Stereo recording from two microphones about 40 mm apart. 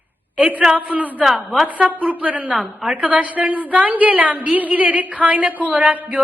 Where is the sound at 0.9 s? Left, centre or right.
Right.